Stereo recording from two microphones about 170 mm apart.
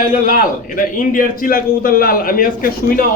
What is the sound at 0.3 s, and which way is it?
A man's voice, 55° left (ahead or behind).